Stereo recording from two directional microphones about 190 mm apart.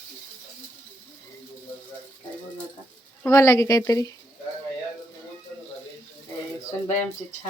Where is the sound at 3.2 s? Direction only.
15° left (ahead or behind).